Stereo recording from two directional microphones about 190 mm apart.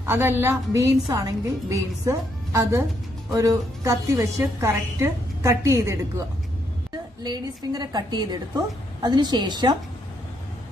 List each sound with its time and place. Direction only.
0.0 s a woman's voice: 10° right (ahead or behind)
7.2 s a woman's voice: 20° right (ahead or behind)